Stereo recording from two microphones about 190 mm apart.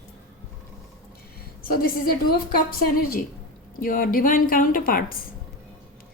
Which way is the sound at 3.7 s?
50° left (ahead or behind).